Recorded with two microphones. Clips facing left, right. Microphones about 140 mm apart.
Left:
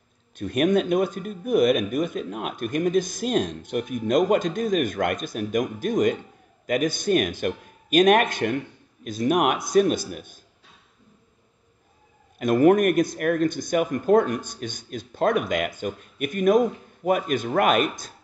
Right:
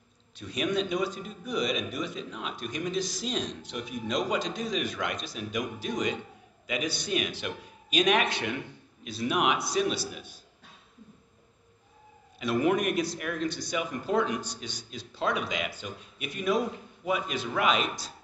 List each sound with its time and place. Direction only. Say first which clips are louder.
0.4 s a man's voice: left 8 dB; 50° left (ahead or behind)
12.4 s a man's voice: left 9 dB; 50° left (ahead or behind)